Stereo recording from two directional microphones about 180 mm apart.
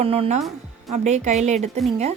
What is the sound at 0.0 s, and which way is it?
A woman's voice, 30° right (ahead or behind).